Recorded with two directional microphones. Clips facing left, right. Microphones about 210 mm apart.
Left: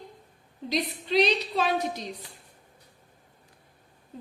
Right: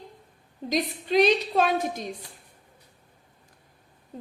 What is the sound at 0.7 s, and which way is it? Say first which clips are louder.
A woman's voice: right 2 dB; 50° right (ahead or behind).